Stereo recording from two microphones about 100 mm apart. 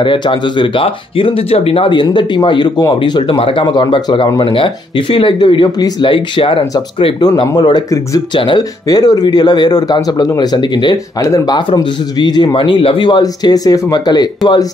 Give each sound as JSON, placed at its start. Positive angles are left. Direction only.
{"t": 0.0, "sound": "speech", "side_deg": 55}
{"t": 3.7, "sound": "speech", "side_deg": 50}
{"t": 7.2, "sound": "speech", "side_deg": 45}
{"t": 8.8, "sound": "speech", "side_deg": 40}
{"t": 11.1, "sound": "speech", "side_deg": 35}
{"t": 13.2, "sound": "speech", "side_deg": 40}